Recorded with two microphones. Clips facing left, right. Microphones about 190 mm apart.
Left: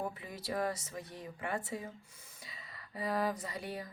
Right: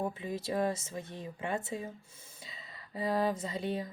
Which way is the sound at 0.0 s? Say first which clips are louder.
Right 5 dB; 25° right (ahead or behind).